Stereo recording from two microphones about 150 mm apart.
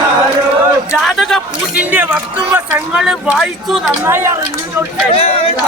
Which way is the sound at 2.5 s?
5° right (ahead or behind).